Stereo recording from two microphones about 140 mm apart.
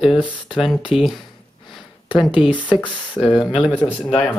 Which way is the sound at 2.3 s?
35° left (ahead or behind).